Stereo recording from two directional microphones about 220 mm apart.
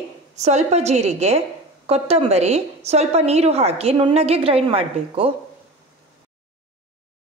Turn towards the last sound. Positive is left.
turn(degrees=-25)  # may be behind; listen again after turning